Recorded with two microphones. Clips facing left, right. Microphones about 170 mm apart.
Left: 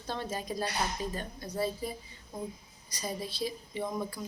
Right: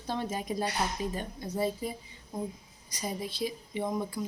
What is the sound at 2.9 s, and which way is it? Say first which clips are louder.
A woman's voice: right 1 dB; 15° right (ahead or behind).